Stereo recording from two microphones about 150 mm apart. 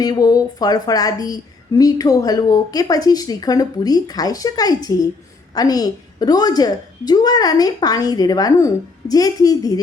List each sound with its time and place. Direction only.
0.0 s a woman's voice: 25° left (ahead or behind)